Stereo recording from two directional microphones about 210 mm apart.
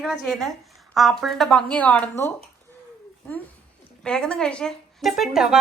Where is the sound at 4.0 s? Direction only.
5° left (ahead or behind).